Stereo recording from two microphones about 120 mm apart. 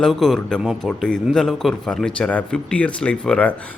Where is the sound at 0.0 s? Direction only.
Centre (ahead or behind).